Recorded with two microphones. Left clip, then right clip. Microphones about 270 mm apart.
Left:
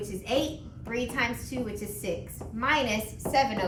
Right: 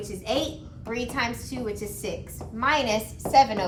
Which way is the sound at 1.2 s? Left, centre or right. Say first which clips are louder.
Right 1 dB; centre.